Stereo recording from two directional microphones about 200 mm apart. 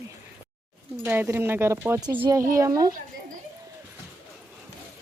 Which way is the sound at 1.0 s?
10° right (ahead or behind).